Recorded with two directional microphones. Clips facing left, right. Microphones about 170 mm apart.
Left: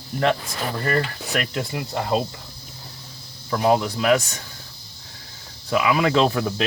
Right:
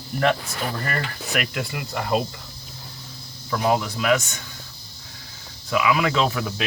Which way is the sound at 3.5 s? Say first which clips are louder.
Left 3 dB; 30° left (ahead or behind).